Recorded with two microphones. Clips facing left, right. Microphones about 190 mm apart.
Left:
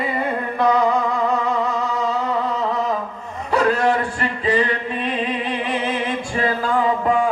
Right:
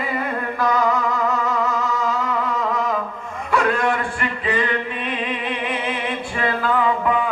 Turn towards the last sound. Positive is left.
turn(degrees=40)  # may be behind; listen again after turning